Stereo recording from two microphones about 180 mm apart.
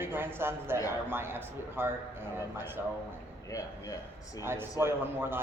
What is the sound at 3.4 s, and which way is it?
A man's voice, 20° left (ahead or behind).